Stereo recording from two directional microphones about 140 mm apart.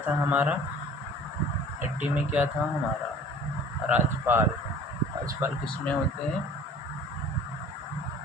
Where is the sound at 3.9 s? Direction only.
15° right (ahead or behind).